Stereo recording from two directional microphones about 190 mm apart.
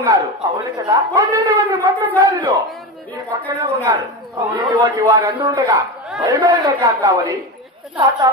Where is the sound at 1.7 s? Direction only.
15° right (ahead or behind).